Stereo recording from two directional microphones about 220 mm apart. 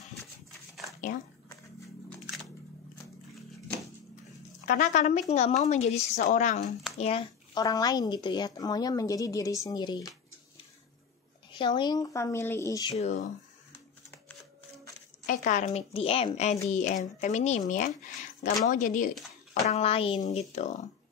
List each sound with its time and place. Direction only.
4.6 s speech: 35° left (ahead or behind)
7.5 s a woman's voice: 15° left (ahead or behind)
11.5 s a woman's voice: 20° left (ahead or behind)
13.0 s speech: 35° left (ahead or behind)
15.2 s speech: 35° left (ahead or behind)